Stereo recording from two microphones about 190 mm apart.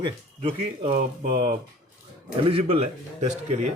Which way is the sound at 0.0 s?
25° right (ahead or behind).